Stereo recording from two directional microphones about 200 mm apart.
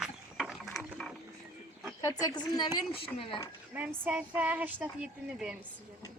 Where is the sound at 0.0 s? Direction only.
Centre (ahead or behind).